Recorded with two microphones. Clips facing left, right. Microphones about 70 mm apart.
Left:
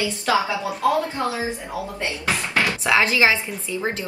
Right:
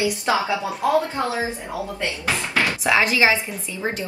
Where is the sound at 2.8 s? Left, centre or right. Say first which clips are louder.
Even; centre.